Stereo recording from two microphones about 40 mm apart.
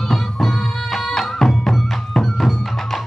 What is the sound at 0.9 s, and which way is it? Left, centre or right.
Music, centre.